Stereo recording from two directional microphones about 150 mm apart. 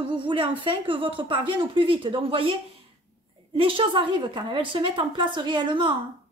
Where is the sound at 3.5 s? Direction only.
35° right (ahead or behind).